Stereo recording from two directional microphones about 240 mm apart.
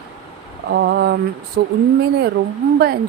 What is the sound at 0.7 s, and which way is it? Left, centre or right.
Speech, right.